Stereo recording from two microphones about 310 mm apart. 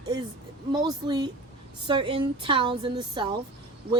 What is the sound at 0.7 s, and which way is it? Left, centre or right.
Speech, centre.